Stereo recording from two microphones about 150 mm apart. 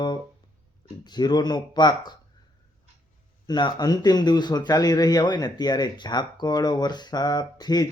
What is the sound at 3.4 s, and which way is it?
Speech, 30° left (ahead or behind).